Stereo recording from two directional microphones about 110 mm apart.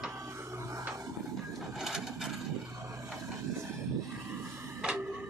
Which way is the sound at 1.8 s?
5° right (ahead or behind).